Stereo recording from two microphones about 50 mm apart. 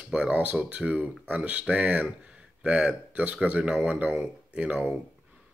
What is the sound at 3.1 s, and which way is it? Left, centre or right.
Speech, right.